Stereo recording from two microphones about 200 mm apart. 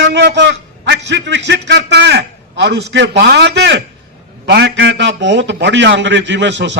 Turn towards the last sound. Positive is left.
turn(degrees=-65)  # may be behind; listen again after turning